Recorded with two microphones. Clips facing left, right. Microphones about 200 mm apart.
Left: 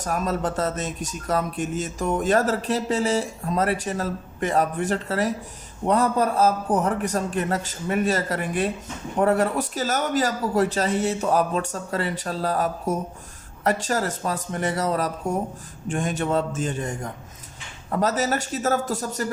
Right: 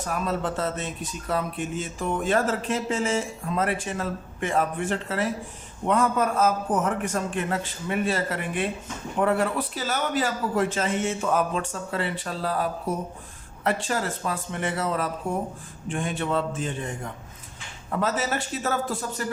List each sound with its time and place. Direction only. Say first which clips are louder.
0.0 s a man's voice: left 2 dB; 40° left (ahead or behind)